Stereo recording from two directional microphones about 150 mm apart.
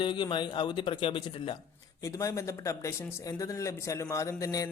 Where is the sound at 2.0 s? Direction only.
20° left (ahead or behind).